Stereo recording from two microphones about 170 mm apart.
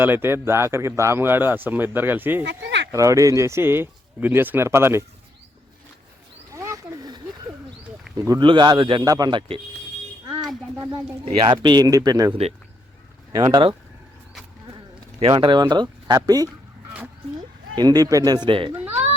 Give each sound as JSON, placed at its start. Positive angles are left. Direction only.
{"t": 0.0, "sound": "speech", "side_deg": -10}
{"t": 2.4, "sound": "speech", "side_deg": -90}
{"t": 2.9, "sound": "speech", "side_deg": -20}
{"t": 6.5, "sound": "wild animals", "side_deg": -20}
{"t": 8.1, "sound": "a man's voice", "side_deg": -20}
{"t": 10.2, "sound": "a sound", "side_deg": -5}
{"t": 11.3, "sound": "a man's voice", "side_deg": -25}
{"t": 13.3, "sound": "a man's voice", "side_deg": -25}
{"t": 15.3, "sound": "a man's voice", "side_deg": -25}
{"t": 17.7, "sound": "a man's voice", "side_deg": -25}